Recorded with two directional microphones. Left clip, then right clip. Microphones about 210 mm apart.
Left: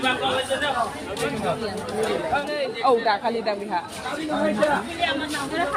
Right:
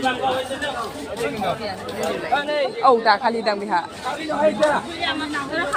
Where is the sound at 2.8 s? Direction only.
20° right (ahead or behind).